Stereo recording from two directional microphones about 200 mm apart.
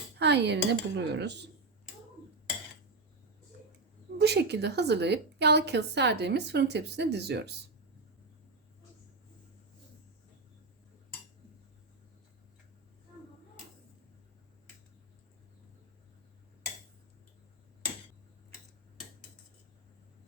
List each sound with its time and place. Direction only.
0.2 s a woman's voice: 60° right (ahead or behind)
4.2 s a woman's voice: 55° right (ahead or behind)